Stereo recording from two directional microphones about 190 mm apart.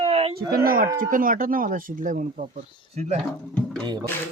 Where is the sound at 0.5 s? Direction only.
50° right (ahead or behind).